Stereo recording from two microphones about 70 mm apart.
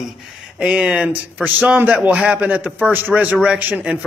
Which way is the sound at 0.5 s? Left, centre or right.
Centre.